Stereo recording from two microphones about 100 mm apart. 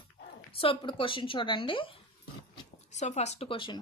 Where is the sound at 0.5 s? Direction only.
65° left (ahead or behind).